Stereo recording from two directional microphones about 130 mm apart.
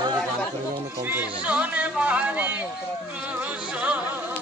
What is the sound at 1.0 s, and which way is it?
Speech, 10° right (ahead or behind).